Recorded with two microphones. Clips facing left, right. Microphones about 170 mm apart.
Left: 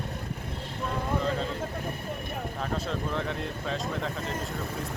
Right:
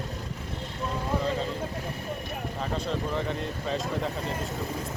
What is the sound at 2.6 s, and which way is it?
Speech, centre (ahead or behind).